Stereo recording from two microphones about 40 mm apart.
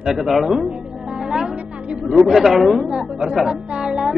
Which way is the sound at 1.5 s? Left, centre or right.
Right.